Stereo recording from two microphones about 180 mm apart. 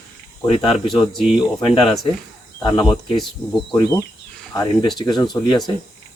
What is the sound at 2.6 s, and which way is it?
Speech, 25° left (ahead or behind).